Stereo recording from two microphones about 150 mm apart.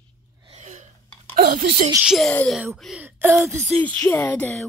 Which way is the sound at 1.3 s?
65° right (ahead or behind).